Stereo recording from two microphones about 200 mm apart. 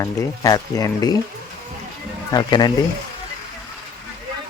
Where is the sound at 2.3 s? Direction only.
20° left (ahead or behind).